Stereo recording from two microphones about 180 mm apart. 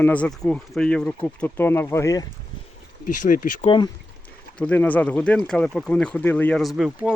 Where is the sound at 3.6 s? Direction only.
25° left (ahead or behind).